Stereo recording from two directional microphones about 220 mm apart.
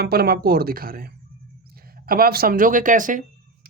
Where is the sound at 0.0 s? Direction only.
45° right (ahead or behind).